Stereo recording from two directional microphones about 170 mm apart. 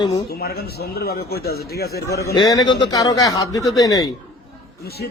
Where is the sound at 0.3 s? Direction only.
65° left (ahead or behind).